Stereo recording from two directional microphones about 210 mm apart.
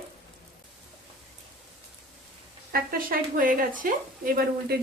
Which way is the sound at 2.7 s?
40° right (ahead or behind).